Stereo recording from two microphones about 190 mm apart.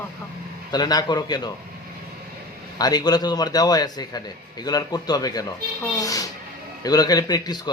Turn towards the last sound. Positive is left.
turn(degrees=20)  # may be behind; listen again after turning